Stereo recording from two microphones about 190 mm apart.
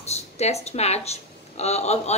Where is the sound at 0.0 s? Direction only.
35° left (ahead or behind).